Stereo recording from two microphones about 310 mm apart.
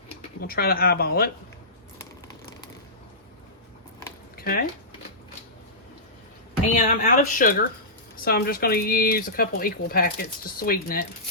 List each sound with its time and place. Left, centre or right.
0.4 s speech: left
4.4 s a sound: left
6.8 s speech: left